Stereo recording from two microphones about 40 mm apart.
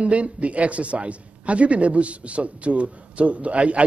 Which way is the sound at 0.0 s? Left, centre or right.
Right.